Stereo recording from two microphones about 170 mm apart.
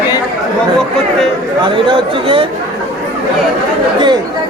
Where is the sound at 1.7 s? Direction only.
30° right (ahead or behind).